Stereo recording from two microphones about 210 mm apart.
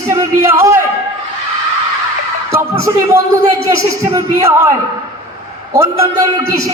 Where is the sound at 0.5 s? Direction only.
15° right (ahead or behind).